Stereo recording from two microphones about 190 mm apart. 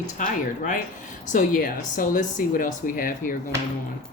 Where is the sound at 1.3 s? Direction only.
45° left (ahead or behind).